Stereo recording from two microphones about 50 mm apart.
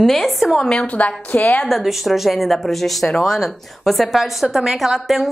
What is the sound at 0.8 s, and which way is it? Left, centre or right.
Speech, left.